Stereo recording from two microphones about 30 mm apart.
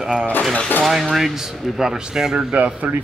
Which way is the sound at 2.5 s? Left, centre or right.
Right.